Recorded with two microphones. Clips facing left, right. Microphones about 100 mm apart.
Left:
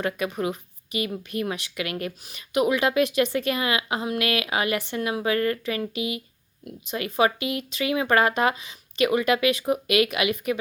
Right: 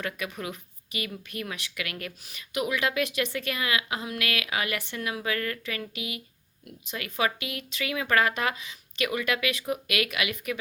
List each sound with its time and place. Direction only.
0.0 s speech: 30° left (ahead or behind)